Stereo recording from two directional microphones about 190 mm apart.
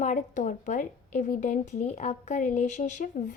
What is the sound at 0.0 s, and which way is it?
Speech, 40° left (ahead or behind).